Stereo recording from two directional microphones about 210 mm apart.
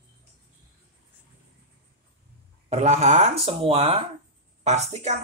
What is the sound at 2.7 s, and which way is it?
Speech, 30° right (ahead or behind).